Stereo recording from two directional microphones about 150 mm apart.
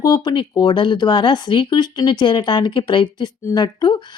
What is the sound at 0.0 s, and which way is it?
A woman's voice, 25° left (ahead or behind).